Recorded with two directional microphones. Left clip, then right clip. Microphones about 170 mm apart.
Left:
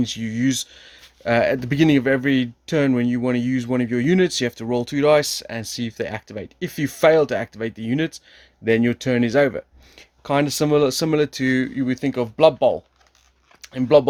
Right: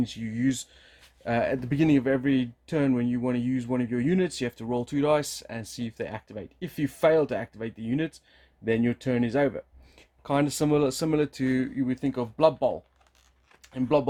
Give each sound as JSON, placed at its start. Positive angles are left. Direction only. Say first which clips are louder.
{"t": 0.0, "sound": "speech", "louder": "left 6 dB", "side_deg": 45}